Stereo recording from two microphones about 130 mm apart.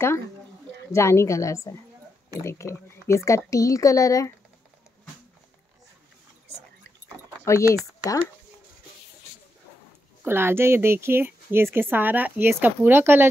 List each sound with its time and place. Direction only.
0.9 s speech: 20° left (ahead or behind)
7.4 s speech: 20° left (ahead or behind)
10.2 s a woman's voice: 15° right (ahead or behind)